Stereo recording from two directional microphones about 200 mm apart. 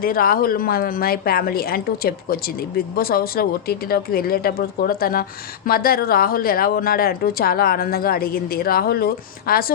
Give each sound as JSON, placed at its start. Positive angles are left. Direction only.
{"t": 0.0, "sound": "a woman's voice", "side_deg": 45}